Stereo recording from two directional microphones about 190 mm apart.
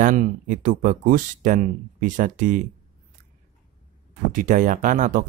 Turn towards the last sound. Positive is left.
turn(degrees=-45)  # may be behind; listen again after turning